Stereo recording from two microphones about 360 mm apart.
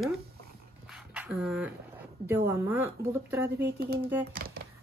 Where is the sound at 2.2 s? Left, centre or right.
Centre.